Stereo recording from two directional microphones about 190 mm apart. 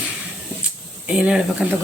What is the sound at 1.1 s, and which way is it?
Speech, 5° right (ahead or behind).